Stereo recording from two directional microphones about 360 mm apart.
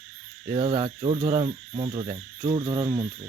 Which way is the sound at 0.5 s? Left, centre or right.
Centre.